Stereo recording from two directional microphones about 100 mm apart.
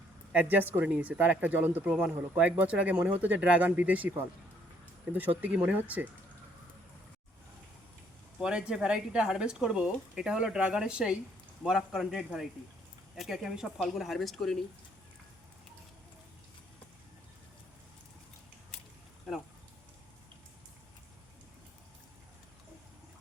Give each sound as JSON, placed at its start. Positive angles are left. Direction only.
{"t": 0.3, "sound": "speech", "side_deg": -20}
{"t": 8.4, "sound": "a man's voice", "side_deg": -10}